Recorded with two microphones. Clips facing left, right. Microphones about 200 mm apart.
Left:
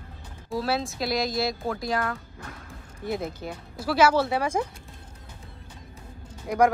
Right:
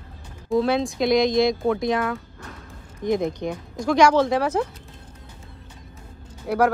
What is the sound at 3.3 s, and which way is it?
Speech, 5° left (ahead or behind).